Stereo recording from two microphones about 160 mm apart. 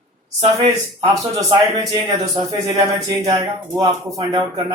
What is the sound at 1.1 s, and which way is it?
Speech, 20° right (ahead or behind).